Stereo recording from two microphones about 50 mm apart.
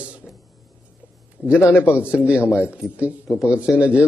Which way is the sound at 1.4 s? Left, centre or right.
Left.